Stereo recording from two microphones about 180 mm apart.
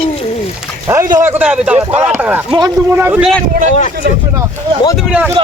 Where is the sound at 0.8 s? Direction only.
15° right (ahead or behind).